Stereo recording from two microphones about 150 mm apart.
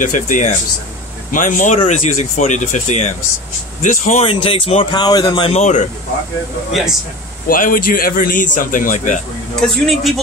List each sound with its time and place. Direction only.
0.0 s a man's voice: 60° left (ahead or behind)
4.3 s speech: 35° left (ahead or behind)
4.9 s speech: 30° left (ahead or behind)
5.5 s speech: 50° left (ahead or behind)
7.4 s a man's voice: 70° left (ahead or behind)
9.6 s a man's voice: centre (ahead or behind)